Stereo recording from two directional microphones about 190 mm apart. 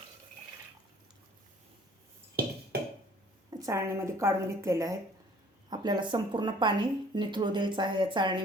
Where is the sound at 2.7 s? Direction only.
55° right (ahead or behind).